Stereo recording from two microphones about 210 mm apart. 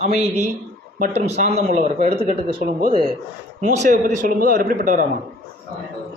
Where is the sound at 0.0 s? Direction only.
30° right (ahead or behind).